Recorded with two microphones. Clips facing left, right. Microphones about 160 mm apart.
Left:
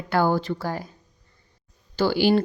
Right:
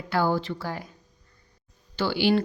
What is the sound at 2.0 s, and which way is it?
Speech, 45° left (ahead or behind).